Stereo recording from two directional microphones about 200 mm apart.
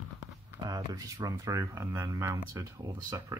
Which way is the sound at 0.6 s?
20° right (ahead or behind).